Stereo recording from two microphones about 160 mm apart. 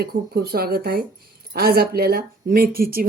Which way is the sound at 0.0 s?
75° right (ahead or behind).